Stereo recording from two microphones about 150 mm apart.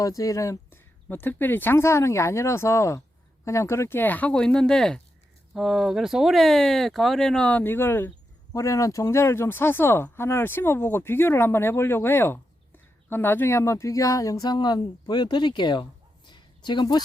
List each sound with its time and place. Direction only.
0.0 s speech: 25° left (ahead or behind)